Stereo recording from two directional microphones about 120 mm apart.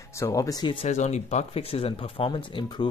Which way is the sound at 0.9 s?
70° left (ahead or behind).